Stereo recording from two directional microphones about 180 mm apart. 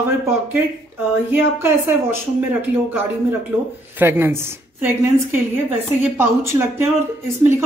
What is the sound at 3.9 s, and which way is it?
Speech, 10° right (ahead or behind).